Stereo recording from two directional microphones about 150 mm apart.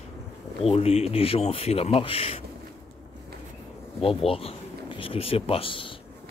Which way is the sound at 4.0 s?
40° left (ahead or behind).